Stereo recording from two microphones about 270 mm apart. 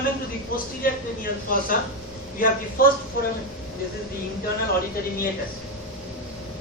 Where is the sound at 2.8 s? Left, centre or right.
Left.